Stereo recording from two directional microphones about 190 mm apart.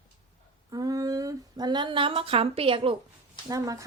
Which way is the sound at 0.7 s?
20° right (ahead or behind).